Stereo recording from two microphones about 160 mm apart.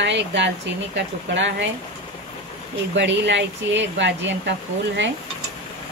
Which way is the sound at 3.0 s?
90° right.